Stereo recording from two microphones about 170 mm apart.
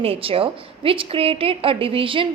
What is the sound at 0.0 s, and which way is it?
A woman's voice, 35° right (ahead or behind).